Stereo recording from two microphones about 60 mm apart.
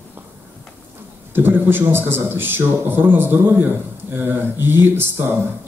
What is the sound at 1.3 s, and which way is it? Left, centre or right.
A man's voice, right.